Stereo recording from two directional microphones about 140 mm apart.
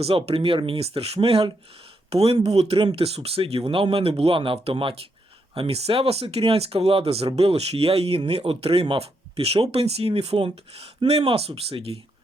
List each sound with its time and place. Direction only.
0.0 s speech: 45° right (ahead or behind)